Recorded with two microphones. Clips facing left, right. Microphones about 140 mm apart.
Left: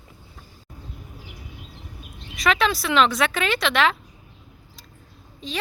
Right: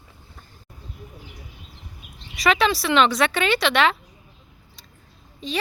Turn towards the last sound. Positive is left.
turn(degrees=0)  # may be behind; listen again after turning